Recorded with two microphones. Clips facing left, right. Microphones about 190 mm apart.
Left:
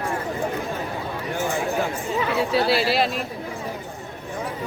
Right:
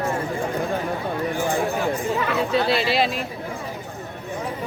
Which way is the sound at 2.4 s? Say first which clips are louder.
Left 2 dB; 5° left (ahead or behind).